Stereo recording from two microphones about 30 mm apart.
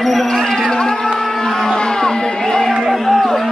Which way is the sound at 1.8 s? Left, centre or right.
Left.